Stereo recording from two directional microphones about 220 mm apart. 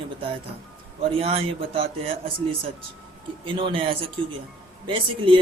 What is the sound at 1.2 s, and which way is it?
Speech, 25° right (ahead or behind).